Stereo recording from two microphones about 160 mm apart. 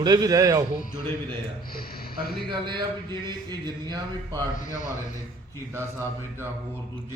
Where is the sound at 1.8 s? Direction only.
70° left (ahead or behind).